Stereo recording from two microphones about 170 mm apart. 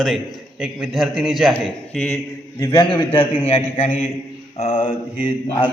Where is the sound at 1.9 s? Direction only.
10° left (ahead or behind).